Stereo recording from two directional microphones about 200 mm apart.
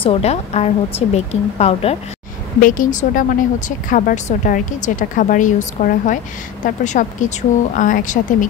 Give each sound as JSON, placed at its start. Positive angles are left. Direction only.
{"t": 0.0, "sound": "speech", "side_deg": 30}
{"t": 2.6, "sound": "speech", "side_deg": 45}